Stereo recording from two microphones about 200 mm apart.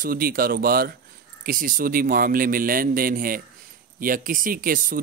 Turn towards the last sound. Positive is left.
turn(degrees=-45)  # may be behind; listen again after turning